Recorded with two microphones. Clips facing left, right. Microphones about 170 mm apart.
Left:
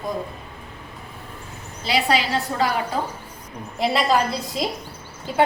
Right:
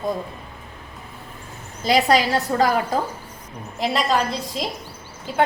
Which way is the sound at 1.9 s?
45° right (ahead or behind).